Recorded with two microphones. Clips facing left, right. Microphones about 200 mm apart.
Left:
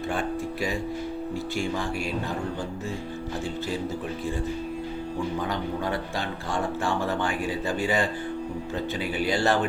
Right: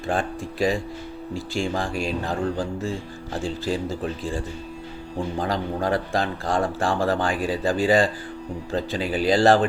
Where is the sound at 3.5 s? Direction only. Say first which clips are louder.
Right 5 dB; 90° right.